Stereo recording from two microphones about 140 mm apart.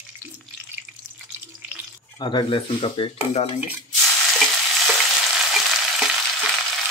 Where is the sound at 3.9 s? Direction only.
Centre (ahead or behind).